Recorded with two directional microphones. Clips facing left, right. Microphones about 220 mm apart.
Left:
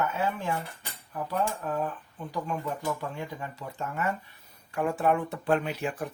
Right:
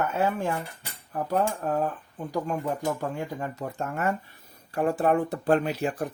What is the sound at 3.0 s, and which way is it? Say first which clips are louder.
Speech: right 5 dB; 45° right (ahead or behind).